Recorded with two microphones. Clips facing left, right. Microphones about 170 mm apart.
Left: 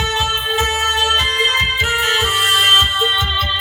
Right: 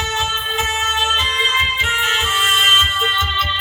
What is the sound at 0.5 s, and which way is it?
Music, 40° left (ahead or behind).